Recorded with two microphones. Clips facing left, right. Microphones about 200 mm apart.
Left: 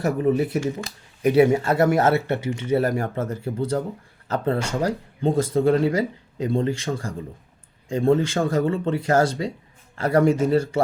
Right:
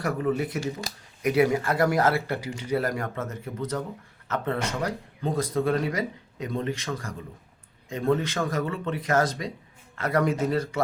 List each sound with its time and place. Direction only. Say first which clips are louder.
0.0 s speech: left 5 dB; 25° left (ahead or behind)
0.6 s speech: left 5 dB; 35° right (ahead or behind)
1.2 s speech: left 5 dB; 30° left (ahead or behind)